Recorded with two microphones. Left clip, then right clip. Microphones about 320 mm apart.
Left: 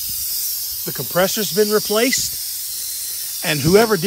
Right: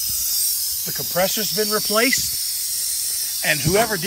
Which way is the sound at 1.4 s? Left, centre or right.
Left.